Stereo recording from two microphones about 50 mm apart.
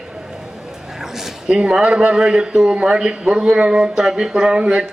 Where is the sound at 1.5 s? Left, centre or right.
Centre.